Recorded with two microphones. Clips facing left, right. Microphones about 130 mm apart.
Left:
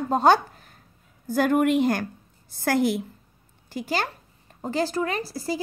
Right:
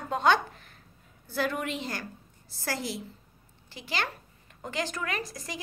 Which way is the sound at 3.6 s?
45° left (ahead or behind).